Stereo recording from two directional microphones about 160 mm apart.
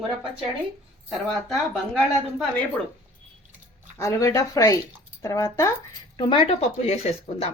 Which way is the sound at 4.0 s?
20° left (ahead or behind).